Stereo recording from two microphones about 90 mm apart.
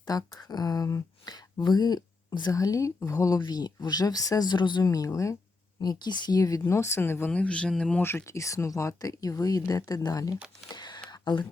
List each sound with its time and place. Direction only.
0.0 s speech: 45° left (ahead or behind)
3.4 s speech: 50° left (ahead or behind)
4.8 s speech: 40° left (ahead or behind)
5.8 s speech: 50° left (ahead or behind); by 7.3 s 25° left (ahead or behind)
7.3 s speech: 10° left (ahead or behind)
8.0 s speech: 30° left (ahead or behind)
10.7 s a sound: 50° left (ahead or behind)